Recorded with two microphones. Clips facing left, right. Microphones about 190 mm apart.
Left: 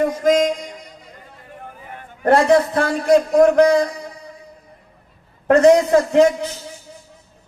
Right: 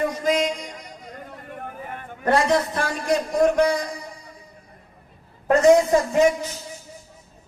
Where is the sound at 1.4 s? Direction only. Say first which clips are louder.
Right 2 dB; 55° right (ahead or behind).